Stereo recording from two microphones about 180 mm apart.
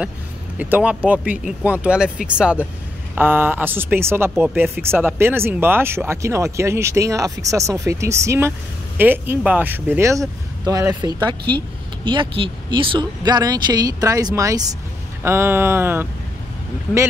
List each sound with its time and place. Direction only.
0.6 s speech: 10° right (ahead or behind)